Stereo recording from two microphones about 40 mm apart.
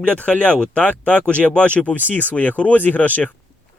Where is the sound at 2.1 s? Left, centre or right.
Left.